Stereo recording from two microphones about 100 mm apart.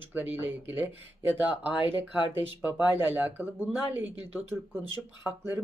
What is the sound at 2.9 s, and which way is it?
Speech, 20° right (ahead or behind).